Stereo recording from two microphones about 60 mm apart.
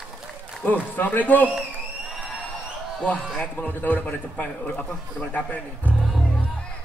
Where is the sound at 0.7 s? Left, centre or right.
Left.